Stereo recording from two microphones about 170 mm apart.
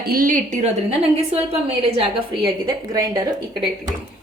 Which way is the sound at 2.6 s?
20° right (ahead or behind).